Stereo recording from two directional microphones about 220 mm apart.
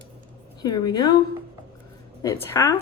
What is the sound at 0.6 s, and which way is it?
Speech, 15° left (ahead or behind).